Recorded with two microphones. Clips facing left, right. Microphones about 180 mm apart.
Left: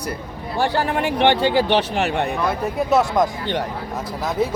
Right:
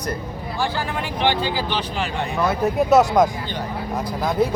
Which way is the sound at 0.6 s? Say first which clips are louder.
Left 5 dB; 65° left (ahead or behind).